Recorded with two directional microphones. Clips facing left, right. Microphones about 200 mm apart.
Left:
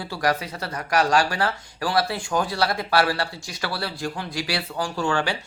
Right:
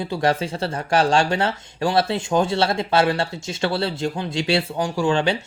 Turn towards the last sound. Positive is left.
turn(degrees=-20)  # may be behind; listen again after turning